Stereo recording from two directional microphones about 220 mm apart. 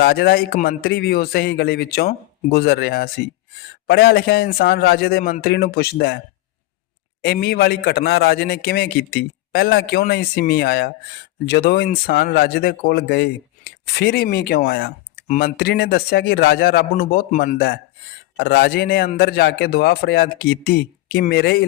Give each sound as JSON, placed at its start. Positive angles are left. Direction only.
{"t": 0.0, "sound": "speech", "side_deg": 45}
{"t": 7.2, "sound": "speech", "side_deg": 45}